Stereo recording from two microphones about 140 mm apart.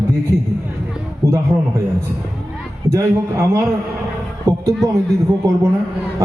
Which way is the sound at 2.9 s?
20° right (ahead or behind).